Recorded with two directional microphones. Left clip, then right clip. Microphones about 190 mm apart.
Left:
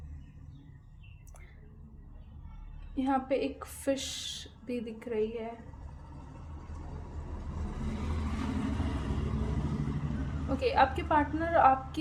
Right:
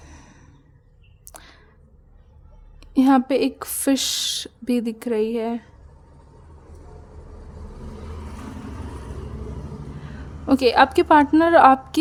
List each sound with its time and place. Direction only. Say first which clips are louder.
1.3 s a sound: right 16 dB; 55° right (ahead or behind)
2.9 s a woman's voice: right 12 dB; 55° right (ahead or behind)
10.5 s a woman's voice: right 11 dB; 55° right (ahead or behind)